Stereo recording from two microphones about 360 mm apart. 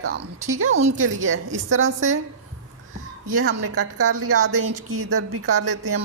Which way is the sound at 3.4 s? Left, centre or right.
Right.